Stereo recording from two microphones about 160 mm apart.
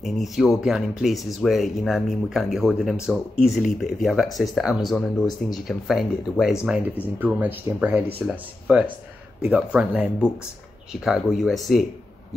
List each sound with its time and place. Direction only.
0.0 s speech: centre (ahead or behind)
7.2 s speech: 10° right (ahead or behind)